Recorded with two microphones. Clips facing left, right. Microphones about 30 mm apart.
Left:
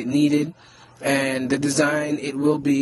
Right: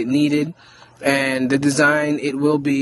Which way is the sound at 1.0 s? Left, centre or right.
Right.